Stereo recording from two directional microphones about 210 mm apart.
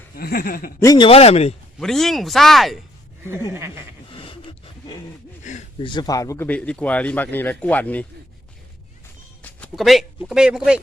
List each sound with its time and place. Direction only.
0.2 s speech: 45° left (ahead or behind)
0.8 s speech: 20° left (ahead or behind)
1.8 s speech: centre (ahead or behind)
3.2 s a sound: 10° right (ahead or behind)
4.1 s a sound: 25° left (ahead or behind)
5.4 s speech: 35° left (ahead or behind)
5.9 s speech: 20° left (ahead or behind)
9.4 s speech: 5° left (ahead or behind)